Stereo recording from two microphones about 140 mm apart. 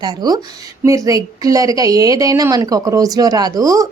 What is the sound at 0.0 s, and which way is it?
A woman's voice, 30° right (ahead or behind).